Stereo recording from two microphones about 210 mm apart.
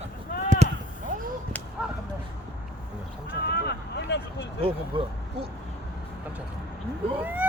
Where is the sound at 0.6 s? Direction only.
30° right (ahead or behind).